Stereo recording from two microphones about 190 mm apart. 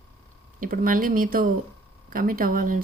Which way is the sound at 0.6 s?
45° right (ahead or behind).